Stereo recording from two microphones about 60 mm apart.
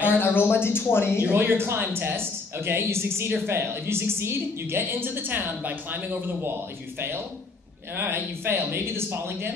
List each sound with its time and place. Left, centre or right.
0.0 s speech: left
1.3 s a man's voice: right
7.9 s a man's voice: right